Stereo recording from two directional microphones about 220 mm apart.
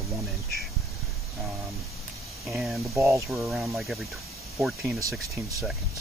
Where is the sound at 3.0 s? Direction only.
15° right (ahead or behind).